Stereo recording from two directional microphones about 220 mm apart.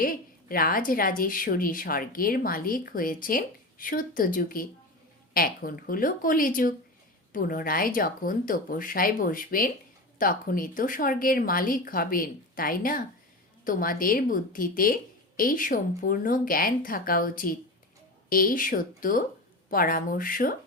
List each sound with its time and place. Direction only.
0.0 s a woman's voice: 40° left (ahead or behind)